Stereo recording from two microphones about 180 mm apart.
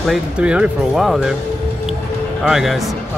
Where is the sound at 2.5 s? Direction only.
Centre (ahead or behind).